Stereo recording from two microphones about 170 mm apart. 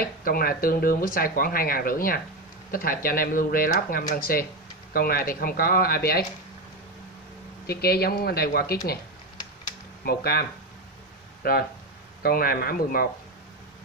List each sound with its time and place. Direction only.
0.0 s speech: 60° left (ahead or behind)
7.6 s speech: 65° left (ahead or behind)
10.0 s speech: 70° left (ahead or behind)
11.4 s speech: 60° left (ahead or behind)